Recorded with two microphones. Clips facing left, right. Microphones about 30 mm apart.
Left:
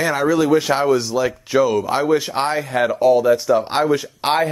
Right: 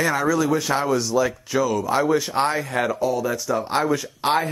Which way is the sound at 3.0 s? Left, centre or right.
Left.